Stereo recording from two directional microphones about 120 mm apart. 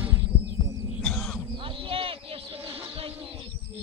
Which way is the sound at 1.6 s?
50° right (ahead or behind).